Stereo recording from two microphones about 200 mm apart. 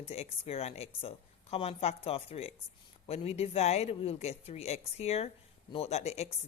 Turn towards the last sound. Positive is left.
turn(degrees=30)  # may be behind; listen again after turning